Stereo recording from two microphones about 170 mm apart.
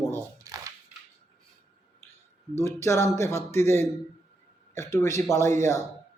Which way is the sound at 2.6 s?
15° left (ahead or behind).